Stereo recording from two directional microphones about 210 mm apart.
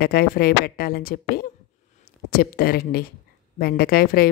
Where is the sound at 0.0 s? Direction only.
50° left (ahead or behind).